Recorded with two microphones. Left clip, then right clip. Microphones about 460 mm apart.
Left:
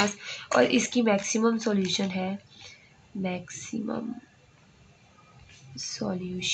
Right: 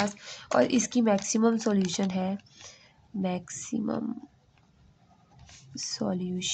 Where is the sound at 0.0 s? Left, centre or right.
Right.